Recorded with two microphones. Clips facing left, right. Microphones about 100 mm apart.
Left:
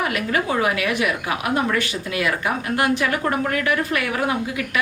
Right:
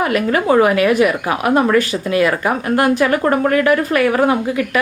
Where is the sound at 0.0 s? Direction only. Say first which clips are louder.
Right 6 dB; 45° right (ahead or behind).